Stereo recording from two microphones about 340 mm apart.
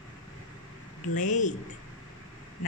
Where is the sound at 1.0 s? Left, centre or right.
Left.